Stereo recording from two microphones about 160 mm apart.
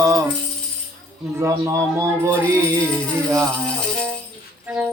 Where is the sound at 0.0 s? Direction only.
20° right (ahead or behind).